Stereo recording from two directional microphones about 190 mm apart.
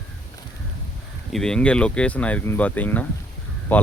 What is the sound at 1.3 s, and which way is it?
Speech, 5° left (ahead or behind).